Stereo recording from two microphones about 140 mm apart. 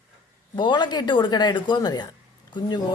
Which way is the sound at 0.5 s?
35° left (ahead or behind).